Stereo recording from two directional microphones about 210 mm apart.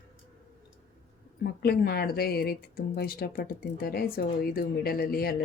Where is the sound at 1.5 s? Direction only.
45° left (ahead or behind).